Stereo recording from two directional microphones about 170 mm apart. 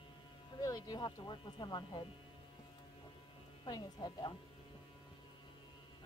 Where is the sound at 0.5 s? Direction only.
25° left (ahead or behind).